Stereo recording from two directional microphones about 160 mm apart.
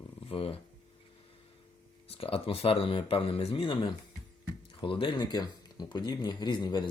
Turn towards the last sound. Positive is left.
turn(degrees=30)  # may be behind; listen again after turning